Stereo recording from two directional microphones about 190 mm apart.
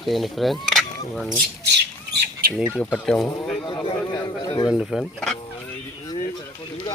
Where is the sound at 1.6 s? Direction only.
60° right (ahead or behind).